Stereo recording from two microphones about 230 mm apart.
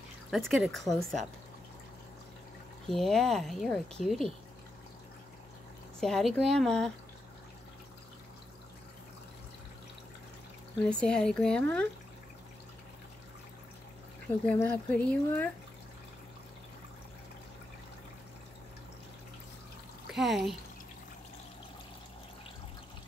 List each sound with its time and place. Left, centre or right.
0.3 s speech: centre
2.9 s speech: centre
5.9 s speech: centre
10.9 s speech: centre
14.2 s speech: centre
20.1 s speech: centre